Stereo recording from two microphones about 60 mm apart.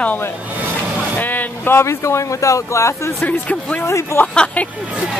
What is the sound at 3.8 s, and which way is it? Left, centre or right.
Speech, left.